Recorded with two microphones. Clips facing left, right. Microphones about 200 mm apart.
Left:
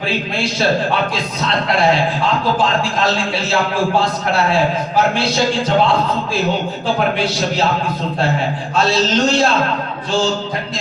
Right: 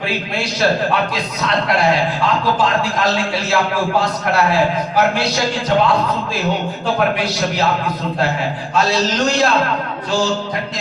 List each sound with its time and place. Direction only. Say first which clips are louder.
3.0 s a man's voice: even; 25° left (ahead or behind)
5.1 s a man's voice: left 2 dB; 25° left (ahead or behind)
6.8 s a man's voice: even; 30° left (ahead or behind)
8.7 s a man's voice: left 2 dB; 25° left (ahead or behind)